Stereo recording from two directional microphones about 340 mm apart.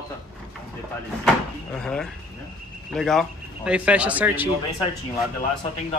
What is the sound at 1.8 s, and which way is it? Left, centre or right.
Speech, centre.